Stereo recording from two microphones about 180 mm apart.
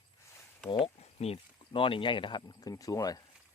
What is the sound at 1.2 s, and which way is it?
Speech, 30° left (ahead or behind).